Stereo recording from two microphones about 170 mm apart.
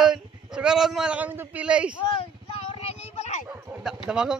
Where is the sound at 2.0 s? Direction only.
30° left (ahead or behind).